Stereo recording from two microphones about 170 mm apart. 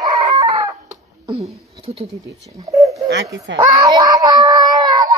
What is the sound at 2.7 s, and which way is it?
Speech, 20° right (ahead or behind).